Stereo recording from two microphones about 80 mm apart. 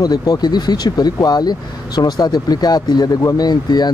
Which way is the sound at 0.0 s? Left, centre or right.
Left.